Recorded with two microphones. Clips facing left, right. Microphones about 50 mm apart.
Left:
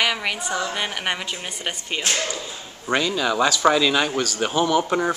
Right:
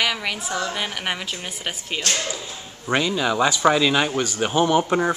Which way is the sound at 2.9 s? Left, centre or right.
Centre.